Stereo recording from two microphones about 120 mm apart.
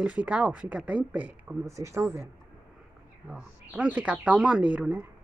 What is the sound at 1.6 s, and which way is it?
Speech, 25° right (ahead or behind).